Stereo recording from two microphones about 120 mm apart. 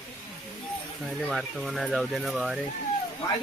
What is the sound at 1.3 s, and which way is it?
Speech, centre (ahead or behind).